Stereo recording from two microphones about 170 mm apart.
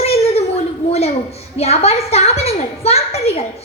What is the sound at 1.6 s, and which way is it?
A woman's voice, 40° left (ahead or behind).